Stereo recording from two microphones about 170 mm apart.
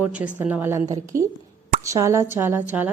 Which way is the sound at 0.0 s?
10° right (ahead or behind).